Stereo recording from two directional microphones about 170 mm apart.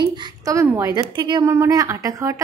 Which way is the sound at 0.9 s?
25° right (ahead or behind).